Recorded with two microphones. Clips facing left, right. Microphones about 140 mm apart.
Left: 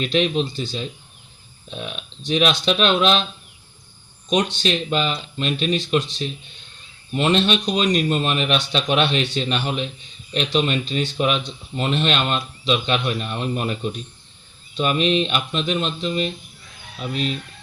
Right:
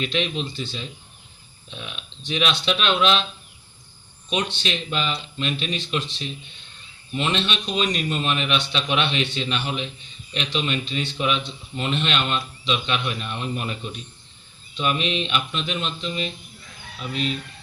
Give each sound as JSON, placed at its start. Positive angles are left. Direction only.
{"t": 0.0, "sound": "speech", "side_deg": 40}
{"t": 4.3, "sound": "speech", "side_deg": 40}
{"t": 14.8, "sound": "speech", "side_deg": 40}